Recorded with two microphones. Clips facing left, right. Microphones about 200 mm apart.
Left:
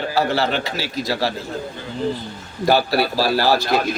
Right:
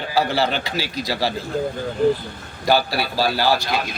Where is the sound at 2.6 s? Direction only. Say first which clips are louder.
Left 3 dB; centre (ahead or behind).